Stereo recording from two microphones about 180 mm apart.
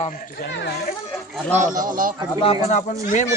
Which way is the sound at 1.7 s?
50° right (ahead or behind).